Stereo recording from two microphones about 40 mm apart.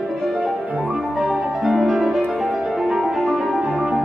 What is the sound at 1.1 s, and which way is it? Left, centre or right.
Music, centre.